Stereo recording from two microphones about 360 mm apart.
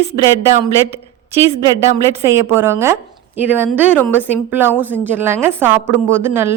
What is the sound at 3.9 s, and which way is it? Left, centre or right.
A woman's voice, centre.